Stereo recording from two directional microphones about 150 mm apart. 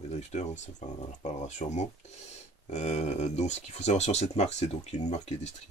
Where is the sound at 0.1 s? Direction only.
45° left (ahead or behind).